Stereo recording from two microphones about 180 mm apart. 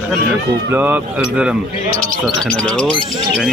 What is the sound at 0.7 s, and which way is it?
Speech, 10° right (ahead or behind).